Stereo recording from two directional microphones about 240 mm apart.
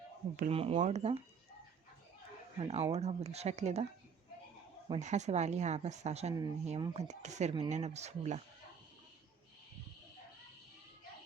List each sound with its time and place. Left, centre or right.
0.3 s speech: right
2.6 s speech: right
4.9 s speech: right